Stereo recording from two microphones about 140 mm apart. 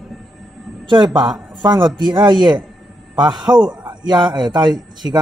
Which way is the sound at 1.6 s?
35° right (ahead or behind).